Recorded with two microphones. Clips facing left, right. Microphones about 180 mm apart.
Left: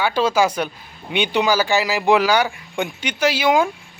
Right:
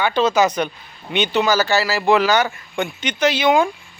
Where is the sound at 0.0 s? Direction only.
10° left (ahead or behind).